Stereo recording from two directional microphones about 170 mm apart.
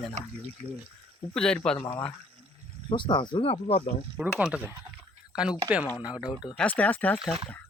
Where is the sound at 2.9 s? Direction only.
25° left (ahead or behind).